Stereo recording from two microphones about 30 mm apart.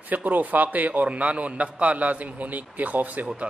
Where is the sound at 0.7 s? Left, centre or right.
Right.